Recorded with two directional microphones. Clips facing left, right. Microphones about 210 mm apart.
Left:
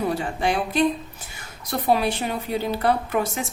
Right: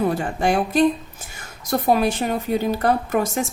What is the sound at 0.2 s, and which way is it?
A woman's voice, 50° right (ahead or behind).